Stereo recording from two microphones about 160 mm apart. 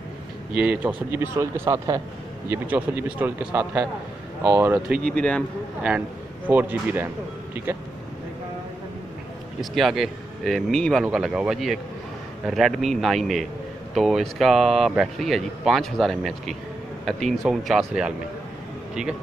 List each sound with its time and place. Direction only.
0.6 s speech: 10° right (ahead or behind)
5.0 s speech: 5° left (ahead or behind)
5.8 s speech: 10° right (ahead or behind)
9.6 s speech: centre (ahead or behind)